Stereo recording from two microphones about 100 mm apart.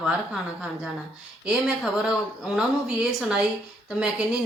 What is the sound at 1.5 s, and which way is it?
Speech, 5° right (ahead or behind).